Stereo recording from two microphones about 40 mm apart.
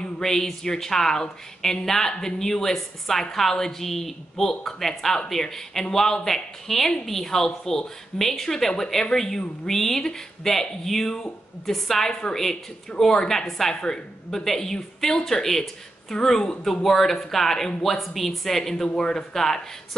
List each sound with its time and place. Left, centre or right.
0.2 s a woman's voice: centre
12.1 s a woman's voice: centre
13.7 s speech: centre